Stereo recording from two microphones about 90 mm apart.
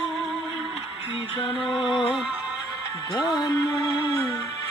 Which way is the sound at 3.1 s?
55° left (ahead or behind).